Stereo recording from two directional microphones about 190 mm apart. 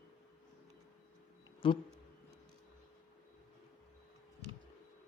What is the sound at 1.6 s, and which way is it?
Speech, 25° left (ahead or behind).